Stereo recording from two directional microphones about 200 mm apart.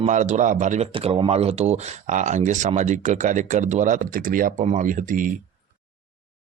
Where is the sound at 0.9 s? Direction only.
25° right (ahead or behind).